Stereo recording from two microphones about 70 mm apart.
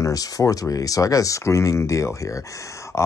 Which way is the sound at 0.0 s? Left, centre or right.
Left.